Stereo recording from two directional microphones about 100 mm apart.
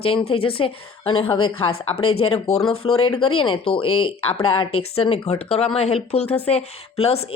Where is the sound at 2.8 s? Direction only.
60° left (ahead or behind).